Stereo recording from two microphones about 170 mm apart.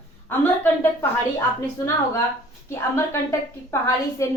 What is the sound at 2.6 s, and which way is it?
A woman's voice, 15° left (ahead or behind).